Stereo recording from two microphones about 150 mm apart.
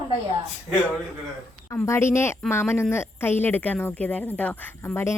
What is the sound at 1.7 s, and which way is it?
Speech, 15° left (ahead or behind).